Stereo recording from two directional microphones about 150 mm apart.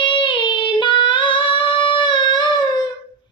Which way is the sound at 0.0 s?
30° left (ahead or behind).